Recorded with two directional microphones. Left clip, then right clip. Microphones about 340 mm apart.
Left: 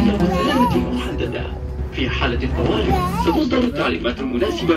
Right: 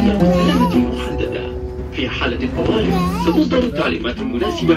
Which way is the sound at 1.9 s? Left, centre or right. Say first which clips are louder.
Right 1 dB; centre.